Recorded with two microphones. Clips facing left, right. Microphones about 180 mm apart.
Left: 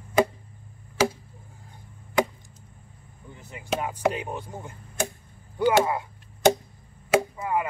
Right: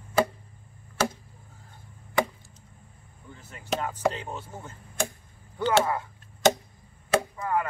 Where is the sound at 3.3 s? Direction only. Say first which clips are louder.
Left 1 dB; 15° left (ahead or behind).